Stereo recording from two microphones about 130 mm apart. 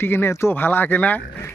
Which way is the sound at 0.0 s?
20° left (ahead or behind).